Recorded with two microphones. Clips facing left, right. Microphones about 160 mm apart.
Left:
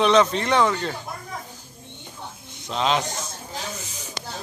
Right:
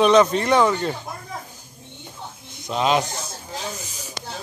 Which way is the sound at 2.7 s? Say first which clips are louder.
Right 3 dB; 10° right (ahead or behind).